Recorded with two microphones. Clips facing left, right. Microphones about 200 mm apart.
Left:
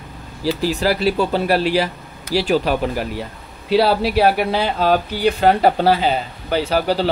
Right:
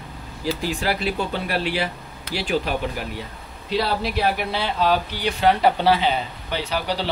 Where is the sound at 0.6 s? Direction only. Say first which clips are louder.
Left 8 dB; 40° left (ahead or behind).